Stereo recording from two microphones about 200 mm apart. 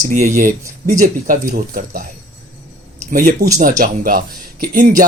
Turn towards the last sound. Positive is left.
turn(degrees=-45)  # may be behind; listen again after turning